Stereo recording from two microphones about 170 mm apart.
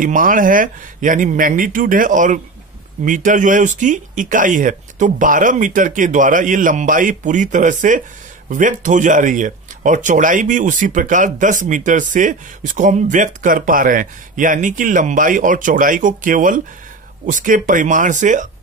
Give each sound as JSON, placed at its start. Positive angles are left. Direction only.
{"t": 0.0, "sound": "speech", "side_deg": -50}